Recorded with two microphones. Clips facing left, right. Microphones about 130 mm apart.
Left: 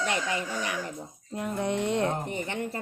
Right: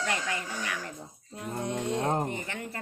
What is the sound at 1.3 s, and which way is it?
Music, 70° left (ahead or behind).